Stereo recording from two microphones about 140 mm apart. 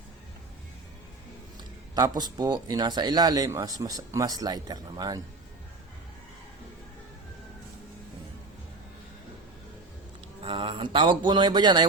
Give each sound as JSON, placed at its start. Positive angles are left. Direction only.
{"t": 2.0, "sound": "speech", "side_deg": -30}
{"t": 10.4, "sound": "speech", "side_deg": -40}